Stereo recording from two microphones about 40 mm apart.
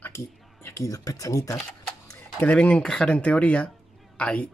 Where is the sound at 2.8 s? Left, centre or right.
Left.